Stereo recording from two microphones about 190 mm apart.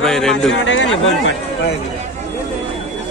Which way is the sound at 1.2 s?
60° left (ahead or behind).